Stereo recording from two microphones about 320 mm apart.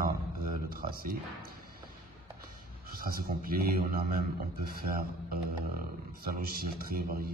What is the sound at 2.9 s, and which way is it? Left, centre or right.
Speech, right.